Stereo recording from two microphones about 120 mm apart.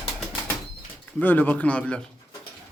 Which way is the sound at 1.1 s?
15° left (ahead or behind).